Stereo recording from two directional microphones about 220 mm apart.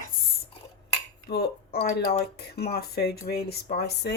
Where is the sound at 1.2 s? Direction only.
45° left (ahead or behind).